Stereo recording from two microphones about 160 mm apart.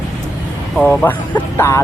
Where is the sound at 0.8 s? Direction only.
10° left (ahead or behind).